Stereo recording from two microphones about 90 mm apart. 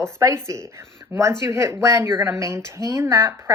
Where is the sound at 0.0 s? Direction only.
30° right (ahead or behind).